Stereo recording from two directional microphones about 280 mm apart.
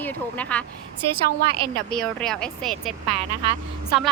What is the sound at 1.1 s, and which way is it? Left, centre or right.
Speech, centre.